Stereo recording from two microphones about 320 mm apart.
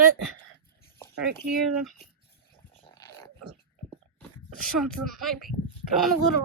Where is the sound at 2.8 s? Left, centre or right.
Centre.